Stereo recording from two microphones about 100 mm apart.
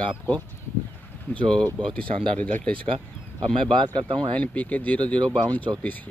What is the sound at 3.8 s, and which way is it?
Speech, 60° right (ahead or behind).